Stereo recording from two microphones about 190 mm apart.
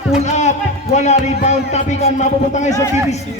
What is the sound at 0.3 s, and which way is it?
Music, 40° left (ahead or behind).